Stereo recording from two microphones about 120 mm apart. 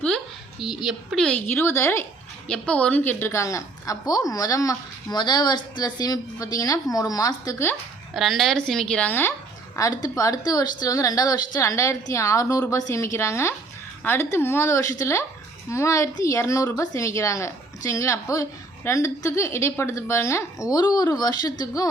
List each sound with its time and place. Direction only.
0.6 s speech: 5° right (ahead or behind)
1.5 s a woman's voice: 20° left (ahead or behind)
2.5 s a woman's voice: 10° left (ahead or behind); by 7.7 s 30° left (ahead or behind)
8.1 s speech: centre (ahead or behind); by 9.3 s 15° left (ahead or behind)
9.7 s a woman's voice: 30° left (ahead or behind)